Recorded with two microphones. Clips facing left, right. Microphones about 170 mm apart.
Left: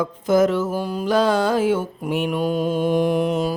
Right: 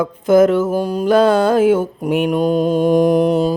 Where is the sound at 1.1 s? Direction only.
55° right (ahead or behind).